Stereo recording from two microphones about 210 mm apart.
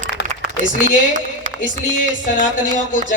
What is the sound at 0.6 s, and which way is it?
Speech, 35° right (ahead or behind).